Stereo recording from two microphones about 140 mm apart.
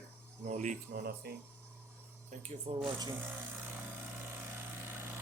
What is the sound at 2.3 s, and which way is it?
Speech, 60° right (ahead or behind).